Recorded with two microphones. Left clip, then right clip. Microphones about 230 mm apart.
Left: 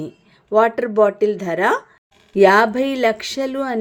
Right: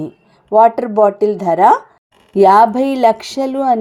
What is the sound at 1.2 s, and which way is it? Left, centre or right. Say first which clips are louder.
A woman's voice: right 7 dB; centre.